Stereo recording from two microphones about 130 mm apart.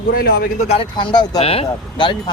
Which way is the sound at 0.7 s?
40° left (ahead or behind).